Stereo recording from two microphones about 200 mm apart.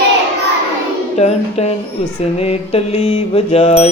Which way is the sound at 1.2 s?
35° left (ahead or behind).